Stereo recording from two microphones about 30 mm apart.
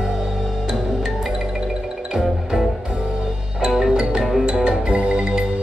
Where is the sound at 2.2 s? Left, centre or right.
Centre; by 4.2 s right.